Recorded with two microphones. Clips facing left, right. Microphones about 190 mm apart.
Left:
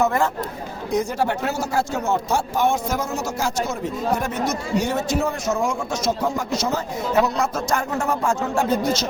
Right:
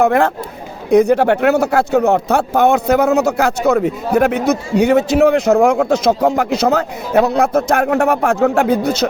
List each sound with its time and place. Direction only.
0.0 s a man's voice: 60° right (ahead or behind)